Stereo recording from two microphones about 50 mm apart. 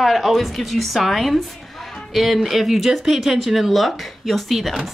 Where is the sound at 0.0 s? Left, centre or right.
Centre.